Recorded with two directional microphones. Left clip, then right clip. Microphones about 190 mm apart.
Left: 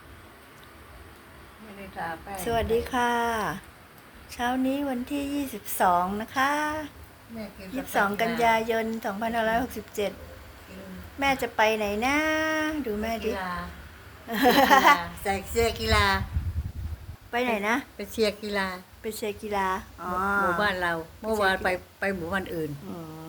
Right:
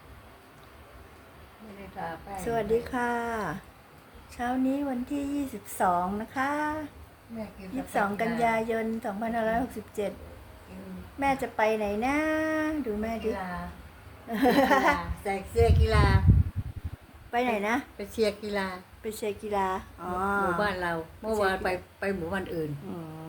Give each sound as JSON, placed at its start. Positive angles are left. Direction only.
{"t": 2.4, "sound": "speech", "side_deg": -5}
{"t": 7.9, "sound": "speech", "side_deg": -5}
{"t": 11.2, "sound": "a woman's voice", "side_deg": -5}
{"t": 14.3, "sound": "a woman's voice", "side_deg": -5}
{"t": 14.9, "sound": "a woman's voice", "side_deg": 15}
{"t": 17.3, "sound": "a woman's voice", "side_deg": -10}
{"t": 17.9, "sound": "speech", "side_deg": 0}
{"t": 19.0, "sound": "a woman's voice", "side_deg": -10}